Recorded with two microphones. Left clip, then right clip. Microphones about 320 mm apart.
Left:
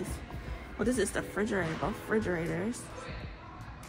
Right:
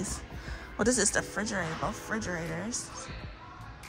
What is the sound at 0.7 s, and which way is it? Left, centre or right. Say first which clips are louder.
Speech: right 4 dB; right.